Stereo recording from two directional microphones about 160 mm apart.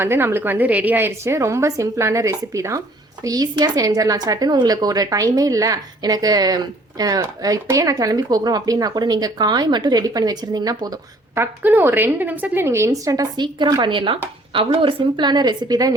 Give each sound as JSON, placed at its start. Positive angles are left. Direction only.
{"t": 0.0, "sound": "a woman's voice", "side_deg": -15}
{"t": 11.3, "sound": "a woman's voice", "side_deg": -10}